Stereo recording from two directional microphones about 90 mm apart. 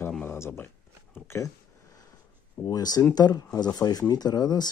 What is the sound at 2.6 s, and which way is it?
Speech, 45° left (ahead or behind).